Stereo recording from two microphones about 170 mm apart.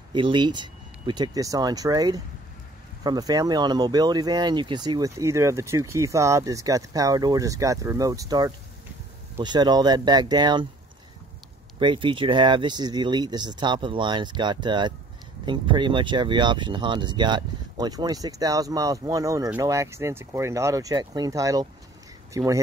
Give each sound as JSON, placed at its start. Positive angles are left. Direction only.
{"t": 0.1, "sound": "speech", "side_deg": -25}
{"t": 11.8, "sound": "speech", "side_deg": -30}